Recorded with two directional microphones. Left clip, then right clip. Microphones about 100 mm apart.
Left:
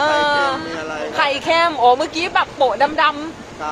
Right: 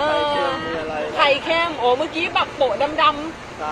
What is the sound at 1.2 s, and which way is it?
Speech, 45° left (ahead or behind).